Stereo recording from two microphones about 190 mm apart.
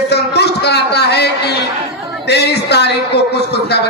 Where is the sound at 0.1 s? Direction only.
60° left (ahead or behind).